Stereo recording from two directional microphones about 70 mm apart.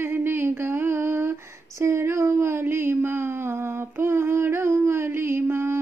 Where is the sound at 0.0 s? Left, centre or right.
Right.